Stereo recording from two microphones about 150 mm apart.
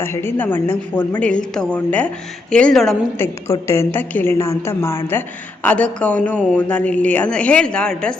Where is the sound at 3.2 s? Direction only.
20° left (ahead or behind).